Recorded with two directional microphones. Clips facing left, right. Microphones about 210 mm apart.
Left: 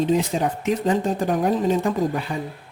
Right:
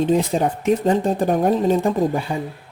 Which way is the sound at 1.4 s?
30° right (ahead or behind).